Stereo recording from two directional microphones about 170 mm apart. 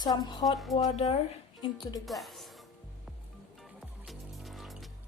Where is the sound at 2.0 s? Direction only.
Centre (ahead or behind).